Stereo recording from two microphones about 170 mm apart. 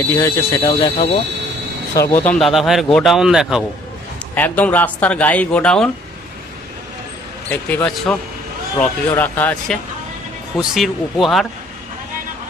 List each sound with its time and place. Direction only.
0.1 s speech: 15° left (ahead or behind)
0.8 s speech: 35° left (ahead or behind)
2.0 s speech: 15° left (ahead or behind)
2.4 s a man's voice: centre (ahead or behind)
4.4 s speech: 10° left (ahead or behind)
7.7 s a man's voice: 5° left (ahead or behind)
10.6 s a man's voice: centre (ahead or behind)